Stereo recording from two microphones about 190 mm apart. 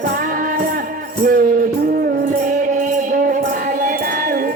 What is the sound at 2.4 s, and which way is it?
Music, 45° right (ahead or behind).